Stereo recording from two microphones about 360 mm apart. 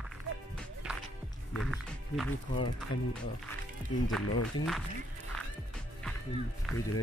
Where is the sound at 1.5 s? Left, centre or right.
Centre.